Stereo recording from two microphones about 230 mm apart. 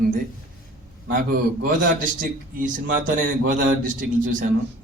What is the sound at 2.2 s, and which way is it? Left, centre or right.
Speech, right.